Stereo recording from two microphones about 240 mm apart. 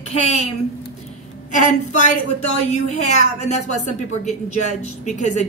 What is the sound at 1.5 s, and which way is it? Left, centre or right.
Speech, left.